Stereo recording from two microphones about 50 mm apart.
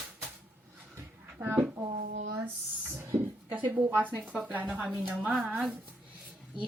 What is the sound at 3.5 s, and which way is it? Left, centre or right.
A child's voice, right.